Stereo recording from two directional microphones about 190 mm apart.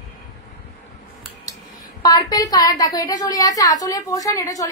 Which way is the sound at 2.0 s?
20° left (ahead or behind).